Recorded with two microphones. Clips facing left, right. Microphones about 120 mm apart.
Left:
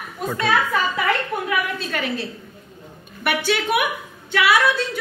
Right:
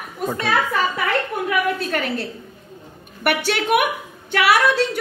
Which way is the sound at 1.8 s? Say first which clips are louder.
Right 2 dB; 50° right (ahead or behind).